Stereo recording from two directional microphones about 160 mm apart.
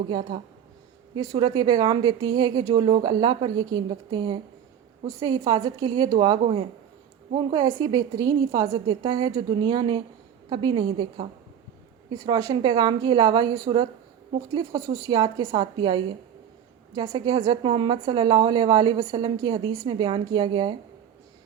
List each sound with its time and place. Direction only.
0.1 s a woman's voice: 30° right (ahead or behind)